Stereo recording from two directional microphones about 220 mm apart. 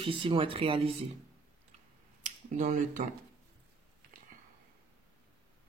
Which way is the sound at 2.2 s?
35° right (ahead or behind).